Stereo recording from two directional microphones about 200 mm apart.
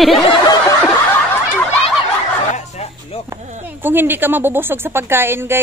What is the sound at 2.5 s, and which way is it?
Bow-wow, 35° left (ahead or behind).